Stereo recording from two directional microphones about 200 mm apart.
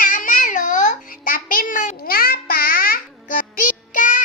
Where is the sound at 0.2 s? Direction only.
40° left (ahead or behind).